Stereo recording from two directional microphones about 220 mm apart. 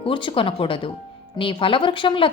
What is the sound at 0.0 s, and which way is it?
A woman's voice, 25° left (ahead or behind).